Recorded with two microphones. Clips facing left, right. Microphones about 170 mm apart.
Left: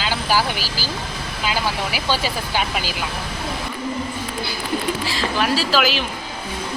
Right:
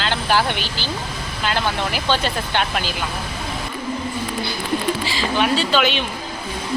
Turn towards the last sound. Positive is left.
turn(degrees=0)  # may be behind; listen again after turning